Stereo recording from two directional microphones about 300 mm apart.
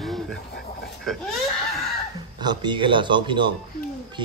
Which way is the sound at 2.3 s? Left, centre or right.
Centre.